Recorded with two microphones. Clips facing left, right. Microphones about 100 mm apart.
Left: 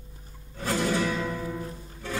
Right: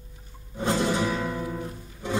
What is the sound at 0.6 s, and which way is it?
Music, 20° right (ahead or behind).